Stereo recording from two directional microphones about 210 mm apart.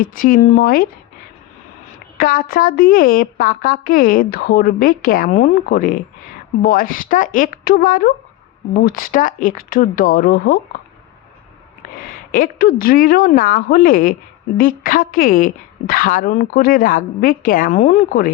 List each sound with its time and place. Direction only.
0.0 s a woman's voice: 40° left (ahead or behind)
2.1 s a woman's voice: 45° left (ahead or behind)
11.9 s a woman's voice: 40° left (ahead or behind)